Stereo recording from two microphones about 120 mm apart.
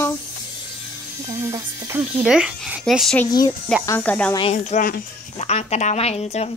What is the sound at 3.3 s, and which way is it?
Speech, 35° left (ahead or behind).